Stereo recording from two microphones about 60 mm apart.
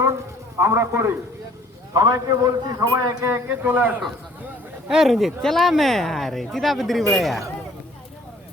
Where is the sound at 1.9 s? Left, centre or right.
Right.